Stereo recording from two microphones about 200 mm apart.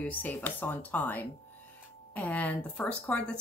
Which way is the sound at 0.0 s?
10° left (ahead or behind).